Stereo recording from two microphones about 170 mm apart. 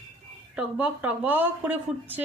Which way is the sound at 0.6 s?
10° right (ahead or behind).